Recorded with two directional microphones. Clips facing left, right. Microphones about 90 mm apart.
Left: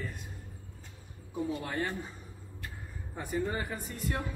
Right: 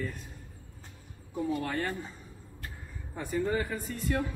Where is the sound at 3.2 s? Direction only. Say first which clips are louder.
Right 3 dB; 20° left (ahead or behind).